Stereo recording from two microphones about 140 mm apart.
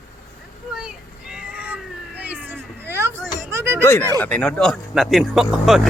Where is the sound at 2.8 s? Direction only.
15° right (ahead or behind).